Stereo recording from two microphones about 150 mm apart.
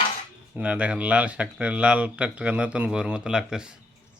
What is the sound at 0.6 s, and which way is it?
Speech, 10° right (ahead or behind).